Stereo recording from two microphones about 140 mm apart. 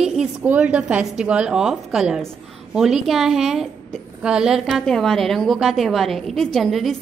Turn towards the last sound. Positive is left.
turn(degrees=0)  # may be behind; listen again after turning